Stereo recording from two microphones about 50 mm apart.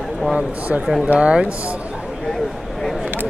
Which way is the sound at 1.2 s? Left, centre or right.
Right.